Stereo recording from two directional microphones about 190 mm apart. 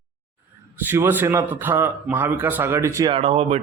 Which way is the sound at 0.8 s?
10° right (ahead or behind).